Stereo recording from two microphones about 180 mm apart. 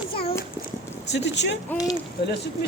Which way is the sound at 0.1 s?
30° left (ahead or behind).